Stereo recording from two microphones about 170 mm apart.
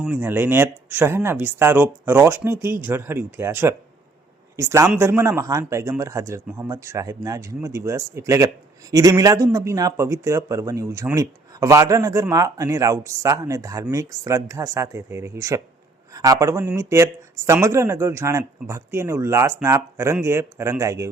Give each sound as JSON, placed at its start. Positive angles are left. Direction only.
{"t": 0.0, "sound": "speech", "side_deg": -10}